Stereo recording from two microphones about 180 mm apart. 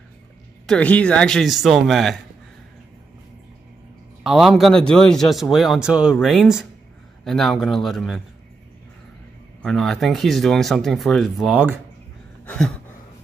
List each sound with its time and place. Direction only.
0.7 s speech: 5° left (ahead or behind)
4.2 s speech: centre (ahead or behind)
9.6 s speech: 5° left (ahead or behind)
12.4 s a sound: 5° left (ahead or behind)